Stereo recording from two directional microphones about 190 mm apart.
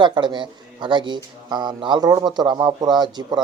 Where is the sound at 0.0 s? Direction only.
25° right (ahead or behind).